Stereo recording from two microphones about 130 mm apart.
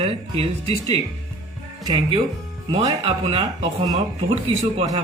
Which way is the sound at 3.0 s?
50° right (ahead or behind).